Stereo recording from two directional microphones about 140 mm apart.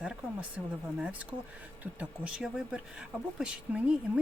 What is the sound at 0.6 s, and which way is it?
Speech, centre (ahead or behind).